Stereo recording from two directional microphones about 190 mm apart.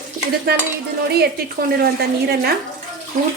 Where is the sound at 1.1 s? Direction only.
55° right (ahead or behind).